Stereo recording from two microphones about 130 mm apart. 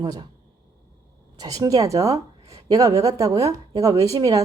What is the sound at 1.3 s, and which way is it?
A woman's voice, 30° right (ahead or behind).